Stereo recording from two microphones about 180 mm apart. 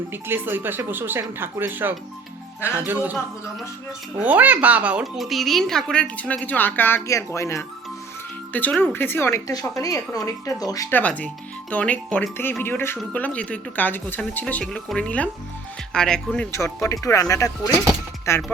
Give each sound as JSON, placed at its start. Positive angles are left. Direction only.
{"t": 0.1, "sound": "speech", "side_deg": -10}
{"t": 4.2, "sound": "speech", "side_deg": -10}
{"t": 16.8, "sound": "speech", "side_deg": 15}